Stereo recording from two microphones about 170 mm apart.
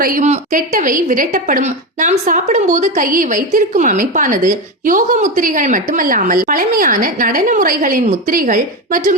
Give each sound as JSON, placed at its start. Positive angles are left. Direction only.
{"t": 0.0, "sound": "a woman's voice", "side_deg": -50}